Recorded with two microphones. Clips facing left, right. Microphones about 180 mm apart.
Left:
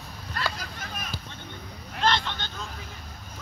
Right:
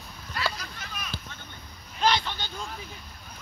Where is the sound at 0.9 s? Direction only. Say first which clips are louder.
Even; 45° left (ahead or behind).